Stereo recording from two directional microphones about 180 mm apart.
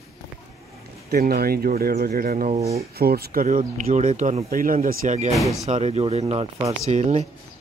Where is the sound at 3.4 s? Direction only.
45° right (ahead or behind).